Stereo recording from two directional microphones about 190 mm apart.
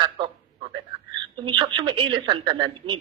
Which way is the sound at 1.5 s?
25° right (ahead or behind).